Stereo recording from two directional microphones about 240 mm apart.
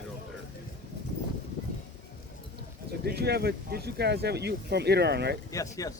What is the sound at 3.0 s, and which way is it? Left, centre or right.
Speech, right.